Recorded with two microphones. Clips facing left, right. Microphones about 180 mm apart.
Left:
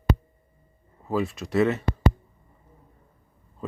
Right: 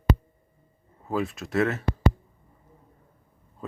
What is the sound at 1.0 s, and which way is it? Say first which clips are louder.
Speech: left 2 dB; centre (ahead or behind).